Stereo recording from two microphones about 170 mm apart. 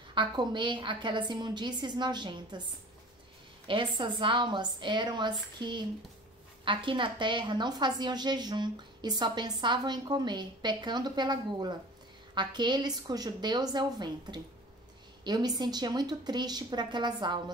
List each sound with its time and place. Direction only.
0.1 s a woman's voice: 25° right (ahead or behind)
3.6 s a woman's voice: 30° right (ahead or behind)